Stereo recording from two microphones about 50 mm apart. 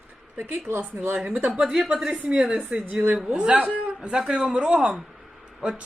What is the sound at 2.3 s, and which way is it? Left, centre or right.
Speech, centre.